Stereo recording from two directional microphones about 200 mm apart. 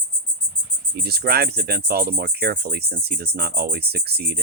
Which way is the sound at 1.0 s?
50° right (ahead or behind).